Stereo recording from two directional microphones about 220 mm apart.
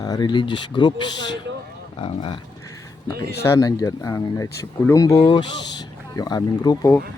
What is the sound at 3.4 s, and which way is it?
Speech, 15° left (ahead or behind).